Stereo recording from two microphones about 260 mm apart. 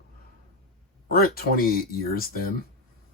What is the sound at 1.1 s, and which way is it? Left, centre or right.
Speech, left.